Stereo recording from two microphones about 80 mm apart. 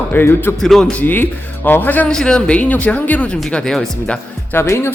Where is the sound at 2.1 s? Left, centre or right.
Centre.